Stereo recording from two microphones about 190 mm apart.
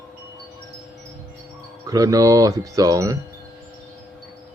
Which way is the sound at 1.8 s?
20° right (ahead or behind).